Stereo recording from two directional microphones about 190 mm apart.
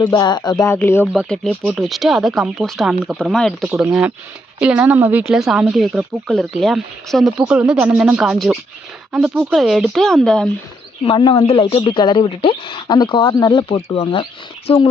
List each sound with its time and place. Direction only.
0.0 s a woman's voice: 20° left (ahead or behind)
1.1 s speech: centre (ahead or behind)
11.0 s a woman's voice: 25° left (ahead or behind)